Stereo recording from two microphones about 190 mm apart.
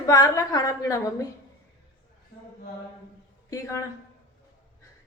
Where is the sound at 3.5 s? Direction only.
15° left (ahead or behind).